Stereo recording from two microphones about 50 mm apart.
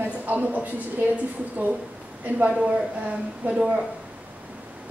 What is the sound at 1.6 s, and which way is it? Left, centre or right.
Speech, right.